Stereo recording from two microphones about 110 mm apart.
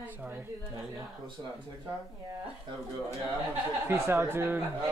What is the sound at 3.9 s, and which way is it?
Speech, 25° right (ahead or behind).